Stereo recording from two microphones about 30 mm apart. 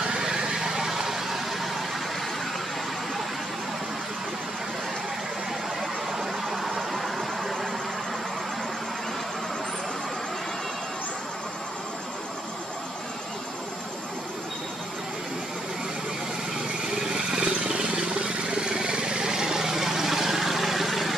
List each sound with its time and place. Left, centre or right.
0.0 s vehicle: right
5.8 s vehicle: centre
17.0 s vehicle: right; by 21.1 s centre